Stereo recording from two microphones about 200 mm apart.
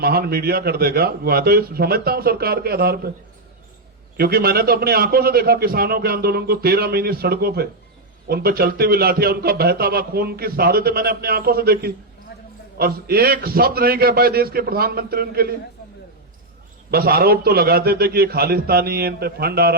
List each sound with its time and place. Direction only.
0.0 s a man's voice: 50° right (ahead or behind)
4.2 s a man's voice: 50° right (ahead or behind)
16.9 s a man's voice: 50° right (ahead or behind)